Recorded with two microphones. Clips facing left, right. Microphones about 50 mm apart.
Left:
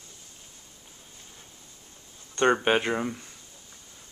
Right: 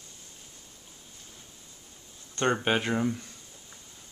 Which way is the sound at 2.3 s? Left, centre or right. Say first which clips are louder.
Left 4 dB; centre.